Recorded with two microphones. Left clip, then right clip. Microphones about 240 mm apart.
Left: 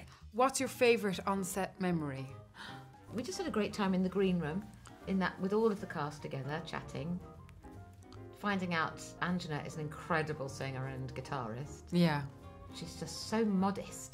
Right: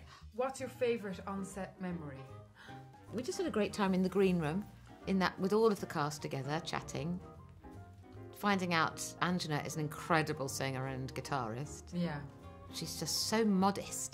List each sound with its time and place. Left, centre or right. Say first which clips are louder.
0.4 s a woman's voice: left 6 dB; left
3.2 s speech: right 1 dB; right
8.4 s speech: right 3 dB; right
11.9 s a woman's voice: left 9 dB; left
12.7 s speech: right 7 dB; right